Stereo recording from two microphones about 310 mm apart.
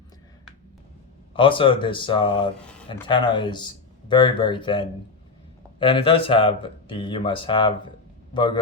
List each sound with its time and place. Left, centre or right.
1.3 s a man's voice: centre